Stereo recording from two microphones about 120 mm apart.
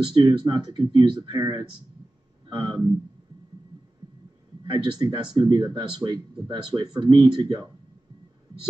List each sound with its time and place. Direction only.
0.0 s speech: 35° right (ahead or behind)
4.6 s speech: 40° right (ahead or behind)